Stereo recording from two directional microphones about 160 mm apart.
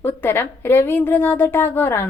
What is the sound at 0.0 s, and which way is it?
A woman's voice, 15° left (ahead or behind).